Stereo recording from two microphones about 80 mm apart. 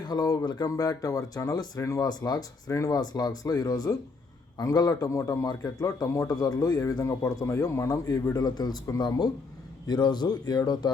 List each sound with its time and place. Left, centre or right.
0.0 s speech: left
7.5 s speech: left
7.9 s speech: left